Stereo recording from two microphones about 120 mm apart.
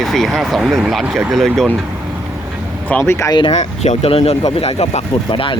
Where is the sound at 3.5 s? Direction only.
70° left (ahead or behind).